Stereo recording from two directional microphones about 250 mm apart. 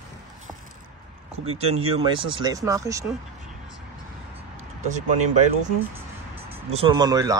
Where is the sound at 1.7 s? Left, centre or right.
Right.